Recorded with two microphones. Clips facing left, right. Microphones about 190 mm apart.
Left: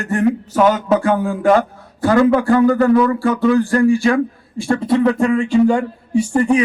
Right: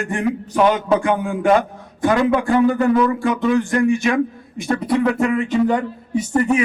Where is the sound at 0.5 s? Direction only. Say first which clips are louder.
Right 1 dB; 40° left (ahead or behind).